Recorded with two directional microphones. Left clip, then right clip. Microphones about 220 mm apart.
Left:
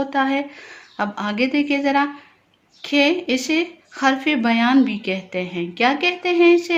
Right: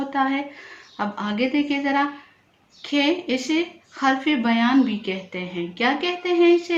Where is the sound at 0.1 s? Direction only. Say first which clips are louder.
Left 3 dB; 45° left (ahead or behind).